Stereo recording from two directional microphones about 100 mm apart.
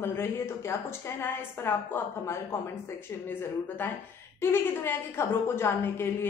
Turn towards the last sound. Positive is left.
turn(degrees=25)  # may be behind; listen again after turning